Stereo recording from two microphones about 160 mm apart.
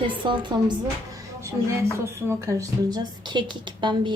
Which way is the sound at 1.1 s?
20° right (ahead or behind).